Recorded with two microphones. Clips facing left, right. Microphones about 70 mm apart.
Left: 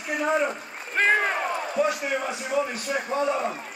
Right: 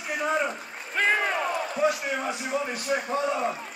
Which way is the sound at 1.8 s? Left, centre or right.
Left.